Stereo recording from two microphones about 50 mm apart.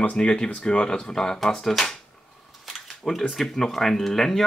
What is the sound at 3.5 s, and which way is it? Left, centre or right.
Speech, centre.